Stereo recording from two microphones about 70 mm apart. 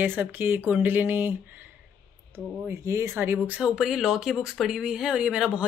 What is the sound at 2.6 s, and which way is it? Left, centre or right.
Speech, right.